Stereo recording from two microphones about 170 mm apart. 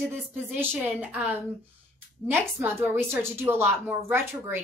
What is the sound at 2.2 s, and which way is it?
A child's voice, 10° right (ahead or behind).